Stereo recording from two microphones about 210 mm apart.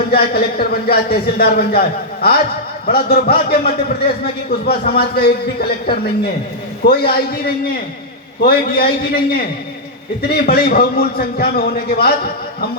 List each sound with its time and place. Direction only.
0.1 s a man's voice: 45° left (ahead or behind)
10.2 s a man's voice: 50° left (ahead or behind)